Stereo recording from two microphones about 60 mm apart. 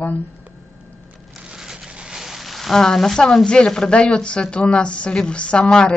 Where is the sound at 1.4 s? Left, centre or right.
Centre.